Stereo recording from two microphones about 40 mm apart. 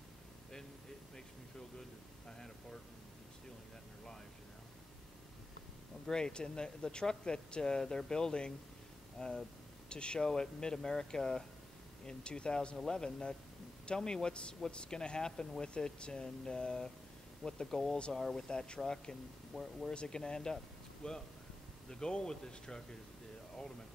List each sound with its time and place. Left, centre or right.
1.8 s a sound: centre
6.0 s speech: centre
9.8 s speech: left
18.5 s speech: left
19.5 s speech: centre
19.9 s speech: left